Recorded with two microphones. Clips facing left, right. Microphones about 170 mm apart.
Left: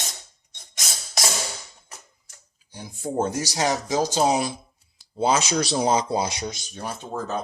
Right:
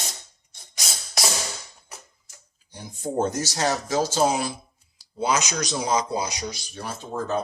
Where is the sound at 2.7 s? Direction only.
10° left (ahead or behind).